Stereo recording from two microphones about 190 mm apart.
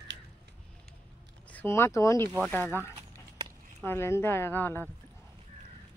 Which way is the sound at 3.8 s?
10° left (ahead or behind).